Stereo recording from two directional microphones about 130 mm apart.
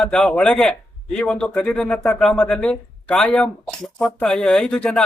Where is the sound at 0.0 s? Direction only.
10° left (ahead or behind).